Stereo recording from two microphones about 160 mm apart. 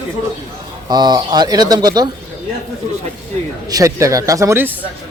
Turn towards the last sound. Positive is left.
turn(degrees=-15)  # may be behind; listen again after turning